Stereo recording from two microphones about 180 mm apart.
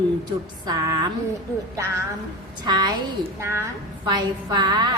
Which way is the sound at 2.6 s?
25° right (ahead or behind).